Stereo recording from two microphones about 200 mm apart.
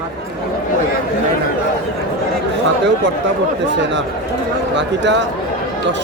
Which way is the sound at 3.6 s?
65° right (ahead or behind).